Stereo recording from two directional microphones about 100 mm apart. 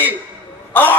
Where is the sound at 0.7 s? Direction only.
20° left (ahead or behind).